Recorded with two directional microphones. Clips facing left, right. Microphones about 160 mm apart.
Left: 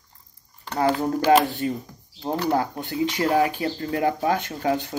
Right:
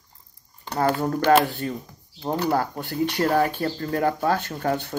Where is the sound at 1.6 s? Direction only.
15° left (ahead or behind).